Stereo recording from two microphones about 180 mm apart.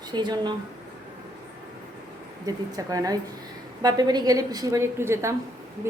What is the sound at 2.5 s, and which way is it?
A woman's voice, 20° right (ahead or behind).